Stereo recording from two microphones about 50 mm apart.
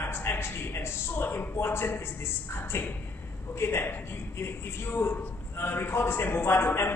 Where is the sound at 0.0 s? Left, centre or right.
Left.